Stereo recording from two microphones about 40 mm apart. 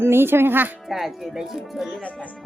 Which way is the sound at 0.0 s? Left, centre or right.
Right.